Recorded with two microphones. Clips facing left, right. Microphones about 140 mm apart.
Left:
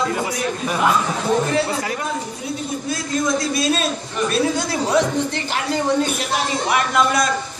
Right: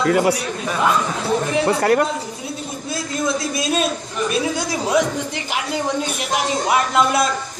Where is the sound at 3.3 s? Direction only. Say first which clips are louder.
Left 1 dB; 20° right (ahead or behind).